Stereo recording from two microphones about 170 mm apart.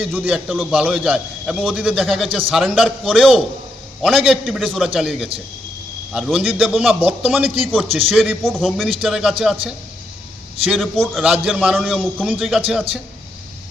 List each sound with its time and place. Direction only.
0.0 s a man's voice: 10° right (ahead or behind)
7.9 s speech: 35° right (ahead or behind)
8.1 s a man's voice: centre (ahead or behind)
10.7 s a man's voice: centre (ahead or behind)